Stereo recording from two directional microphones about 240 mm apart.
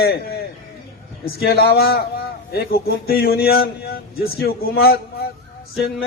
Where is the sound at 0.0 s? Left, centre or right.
Left.